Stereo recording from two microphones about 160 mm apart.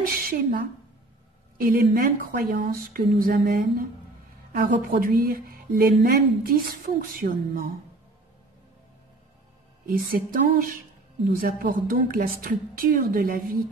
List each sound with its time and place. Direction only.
0.0 s a woman's voice: 65° right (ahead or behind)
9.8 s a woman's voice: 65° right (ahead or behind)